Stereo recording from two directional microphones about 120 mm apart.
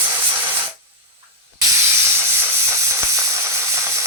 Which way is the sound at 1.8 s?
20° right (ahead or behind).